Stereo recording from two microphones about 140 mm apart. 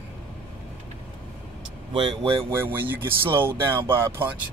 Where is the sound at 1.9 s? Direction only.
35° right (ahead or behind).